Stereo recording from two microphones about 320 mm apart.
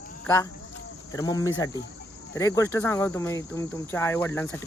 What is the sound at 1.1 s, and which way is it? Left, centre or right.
Speech, centre.